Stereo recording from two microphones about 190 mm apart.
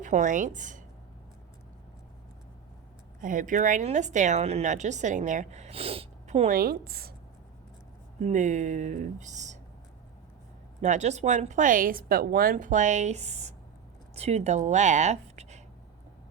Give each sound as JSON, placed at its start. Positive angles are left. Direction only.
{"t": 0.0, "sound": "a woman's voice", "side_deg": -40}
{"t": 3.2, "sound": "a woman's voice", "side_deg": -45}
{"t": 8.2, "sound": "a woman's voice", "side_deg": -40}
{"t": 10.8, "sound": "a woman's voice", "side_deg": -40}